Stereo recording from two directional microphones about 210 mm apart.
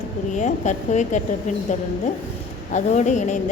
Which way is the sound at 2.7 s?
35° left (ahead or behind).